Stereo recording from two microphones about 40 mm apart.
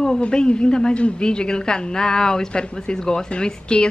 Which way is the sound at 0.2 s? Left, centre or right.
Left.